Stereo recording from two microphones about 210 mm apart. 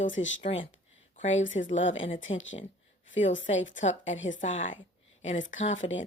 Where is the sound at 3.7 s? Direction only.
35° left (ahead or behind).